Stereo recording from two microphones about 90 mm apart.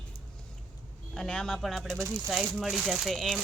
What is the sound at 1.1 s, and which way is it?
A woman's voice, 5° left (ahead or behind).